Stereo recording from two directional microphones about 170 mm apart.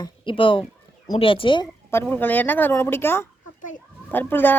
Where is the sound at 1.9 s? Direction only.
10° left (ahead or behind).